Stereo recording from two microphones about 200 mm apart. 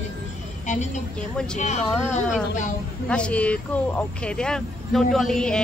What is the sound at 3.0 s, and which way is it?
Speech, 5° left (ahead or behind).